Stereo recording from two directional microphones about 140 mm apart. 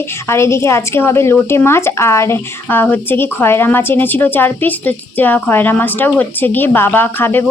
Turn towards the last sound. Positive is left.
turn(degrees=15)  # may be behind; listen again after turning